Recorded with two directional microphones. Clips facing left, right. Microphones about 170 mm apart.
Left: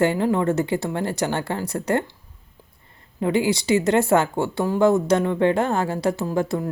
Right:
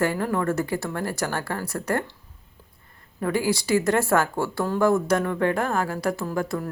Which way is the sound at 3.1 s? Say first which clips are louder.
Left 3 dB; 20° left (ahead or behind).